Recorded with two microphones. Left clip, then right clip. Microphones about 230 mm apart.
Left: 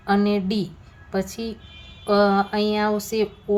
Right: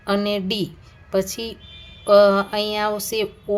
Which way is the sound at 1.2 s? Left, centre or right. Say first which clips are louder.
Right 4 dB; right.